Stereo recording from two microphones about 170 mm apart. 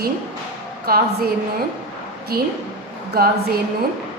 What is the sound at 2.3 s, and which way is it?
Speech, 65° right (ahead or behind).